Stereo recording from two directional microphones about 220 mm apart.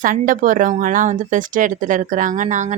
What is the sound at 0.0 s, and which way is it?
A woman's voice, 35° right (ahead or behind).